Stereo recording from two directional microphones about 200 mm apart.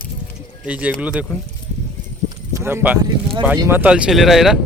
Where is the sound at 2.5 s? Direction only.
10° right (ahead or behind).